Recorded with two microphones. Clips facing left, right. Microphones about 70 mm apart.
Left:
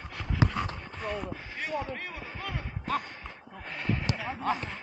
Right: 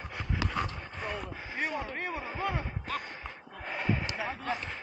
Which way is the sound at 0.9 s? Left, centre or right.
Centre.